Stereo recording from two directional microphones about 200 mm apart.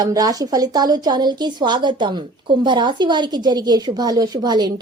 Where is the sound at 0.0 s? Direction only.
20° right (ahead or behind).